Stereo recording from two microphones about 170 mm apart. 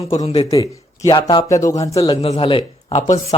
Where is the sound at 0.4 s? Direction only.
20° left (ahead or behind).